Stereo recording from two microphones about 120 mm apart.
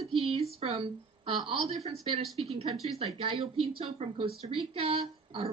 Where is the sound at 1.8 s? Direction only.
60° right (ahead or behind).